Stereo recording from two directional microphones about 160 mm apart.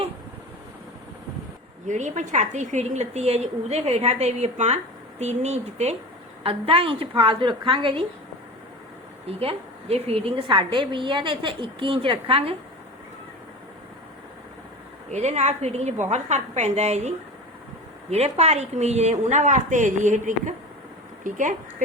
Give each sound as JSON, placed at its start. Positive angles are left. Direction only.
{"t": 1.9, "sound": "a woman's voice", "side_deg": -50}
{"t": 9.2, "sound": "a woman's voice", "side_deg": -40}
{"t": 15.1, "sound": "a woman's voice", "side_deg": -45}